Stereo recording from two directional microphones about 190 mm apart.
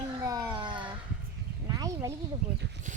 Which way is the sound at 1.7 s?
20° right (ahead or behind).